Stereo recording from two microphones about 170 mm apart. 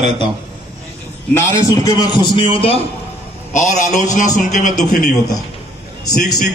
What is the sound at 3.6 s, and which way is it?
A man's voice, 45° left (ahead or behind).